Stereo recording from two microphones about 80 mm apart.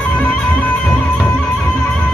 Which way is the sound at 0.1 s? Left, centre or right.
Centre.